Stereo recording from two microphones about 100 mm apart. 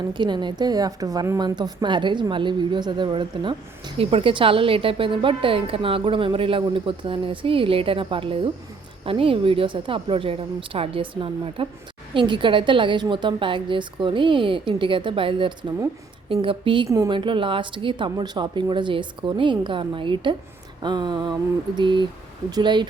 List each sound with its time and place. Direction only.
0.1 s a woman's voice: 50° right (ahead or behind)
4.0 s a woman's voice: 65° right (ahead or behind); by 22.9 s 50° right (ahead or behind)